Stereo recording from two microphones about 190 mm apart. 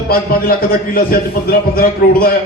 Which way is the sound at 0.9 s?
50° left (ahead or behind).